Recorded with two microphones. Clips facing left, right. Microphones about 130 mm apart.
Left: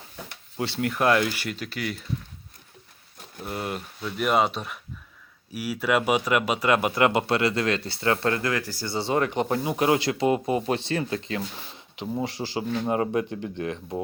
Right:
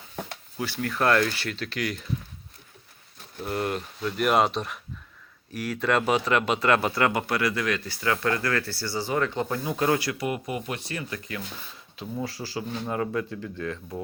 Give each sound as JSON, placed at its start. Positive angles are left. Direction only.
{"t": 0.5, "sound": "speech", "side_deg": 25}
{"t": 0.9, "sound": "a man's voice", "side_deg": 10}
{"t": 3.4, "sound": "a man's voice", "side_deg": 5}